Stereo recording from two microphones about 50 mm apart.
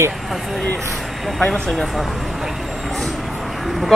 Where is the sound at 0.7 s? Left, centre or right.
Centre.